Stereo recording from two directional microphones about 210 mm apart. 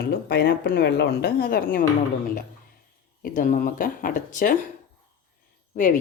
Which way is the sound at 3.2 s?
40° left (ahead or behind).